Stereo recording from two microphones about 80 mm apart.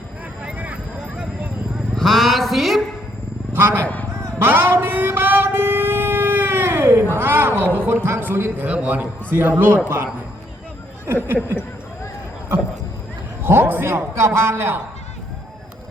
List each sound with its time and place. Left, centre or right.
0.4 s vehicle: centre
2.0 s a sound: centre
3.5 s a sound: right
7.8 s speech: right
8.6 s a man's voice: centre
11.1 s a man's voice: right
13.4 s a man's voice: right